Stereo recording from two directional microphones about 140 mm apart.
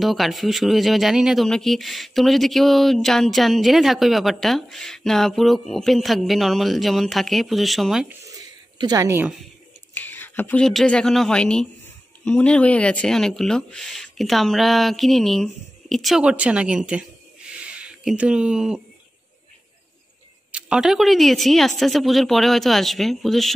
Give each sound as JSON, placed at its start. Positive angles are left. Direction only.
{"t": 0.0, "sound": "speech", "side_deg": 0}
{"t": 8.1, "sound": "a sound", "side_deg": -25}
{"t": 9.9, "sound": "speech", "side_deg": 15}
{"t": 20.5, "sound": "speech", "side_deg": -5}